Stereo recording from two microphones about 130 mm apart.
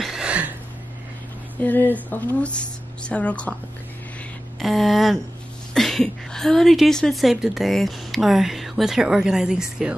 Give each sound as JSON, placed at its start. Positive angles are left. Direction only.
{"t": 0.0, "sound": "a sound", "side_deg": -5}
{"t": 1.6, "sound": "speech", "side_deg": 15}
{"t": 4.6, "sound": "a woman's voice", "side_deg": 0}